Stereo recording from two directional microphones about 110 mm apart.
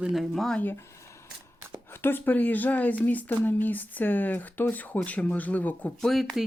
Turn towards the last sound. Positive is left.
turn(degrees=0)  # may be behind; listen again after turning